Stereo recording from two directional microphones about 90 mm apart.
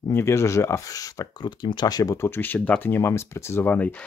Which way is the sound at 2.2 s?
25° left (ahead or behind).